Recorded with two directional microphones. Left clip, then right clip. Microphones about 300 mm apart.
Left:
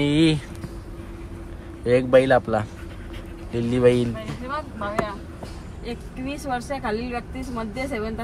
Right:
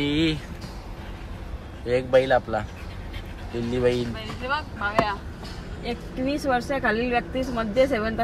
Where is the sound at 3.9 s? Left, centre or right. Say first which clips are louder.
Left 6 dB; left.